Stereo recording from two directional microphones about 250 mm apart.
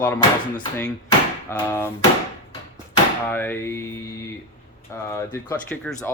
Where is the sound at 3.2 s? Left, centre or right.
Centre.